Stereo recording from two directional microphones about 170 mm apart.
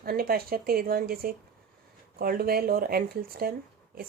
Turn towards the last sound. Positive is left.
turn(degrees=-60)  # may be behind; listen again after turning